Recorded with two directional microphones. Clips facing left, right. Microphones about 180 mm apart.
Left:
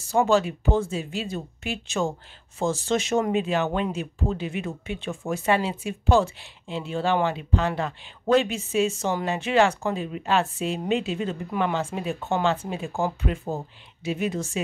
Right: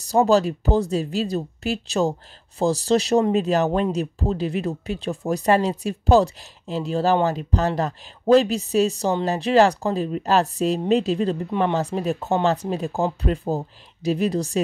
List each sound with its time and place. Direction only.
0.0 s speech: 35° right (ahead or behind)